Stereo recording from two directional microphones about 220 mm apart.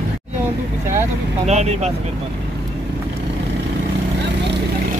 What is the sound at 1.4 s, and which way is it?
Speech, 30° right (ahead or behind).